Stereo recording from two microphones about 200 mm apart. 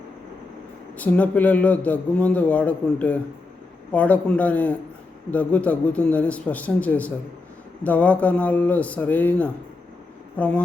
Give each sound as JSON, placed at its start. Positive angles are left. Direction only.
{"t": 0.9, "sound": "a man's voice", "side_deg": 5}